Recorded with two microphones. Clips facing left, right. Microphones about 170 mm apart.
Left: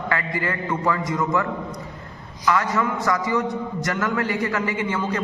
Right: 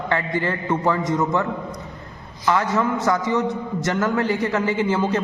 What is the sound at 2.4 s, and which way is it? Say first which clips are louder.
A man's voice: right 2 dB; 25° right (ahead or behind).